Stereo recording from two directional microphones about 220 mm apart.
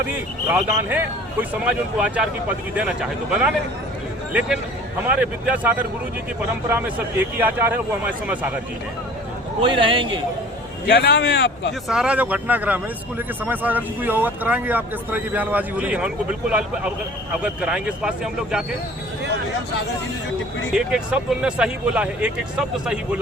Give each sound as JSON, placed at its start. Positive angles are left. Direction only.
{"t": 0.4, "sound": "speech", "side_deg": -5}
{"t": 9.6, "sound": "a man's voice", "side_deg": -25}
{"t": 10.8, "sound": "speech", "side_deg": 45}
{"t": 11.9, "sound": "speech", "side_deg": -5}
{"t": 20.7, "sound": "speech", "side_deg": -5}